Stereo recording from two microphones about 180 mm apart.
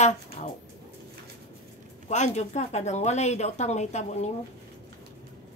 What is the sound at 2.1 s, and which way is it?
Speech, 40° left (ahead or behind).